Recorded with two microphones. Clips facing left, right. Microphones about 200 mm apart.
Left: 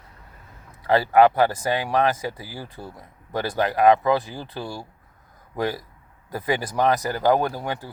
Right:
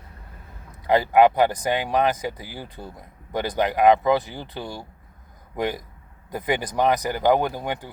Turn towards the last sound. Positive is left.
turn(degrees=-20)  # may be behind; listen again after turning